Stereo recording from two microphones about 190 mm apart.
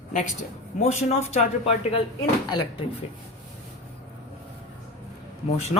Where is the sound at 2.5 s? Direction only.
20° left (ahead or behind).